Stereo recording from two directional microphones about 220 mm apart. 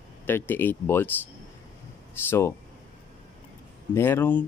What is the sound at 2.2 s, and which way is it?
Speech, 10° left (ahead or behind).